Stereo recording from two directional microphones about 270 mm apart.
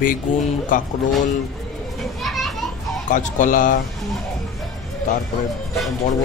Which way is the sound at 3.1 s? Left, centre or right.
Left.